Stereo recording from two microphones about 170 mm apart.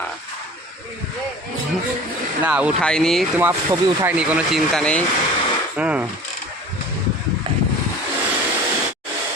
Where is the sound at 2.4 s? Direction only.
5° right (ahead or behind).